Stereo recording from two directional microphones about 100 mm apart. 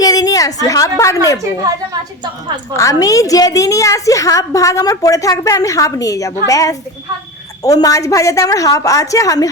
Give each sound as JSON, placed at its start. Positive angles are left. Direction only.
{"t": 0.0, "sound": "a woman's voice", "side_deg": 40}
{"t": 2.7, "sound": "a woman's voice", "side_deg": 35}